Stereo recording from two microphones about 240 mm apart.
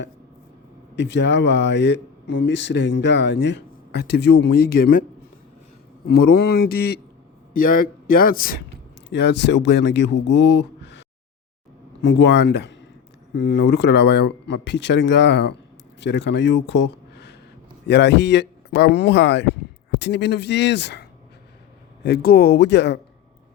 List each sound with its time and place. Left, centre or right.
0.9 s a man's voice: left
6.3 s a man's voice: left
10.3 s a sound: left
12.0 s speech: left